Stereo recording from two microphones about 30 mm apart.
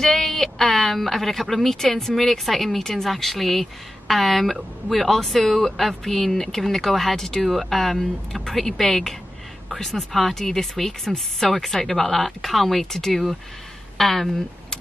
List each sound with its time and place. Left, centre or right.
0.0 s speech: centre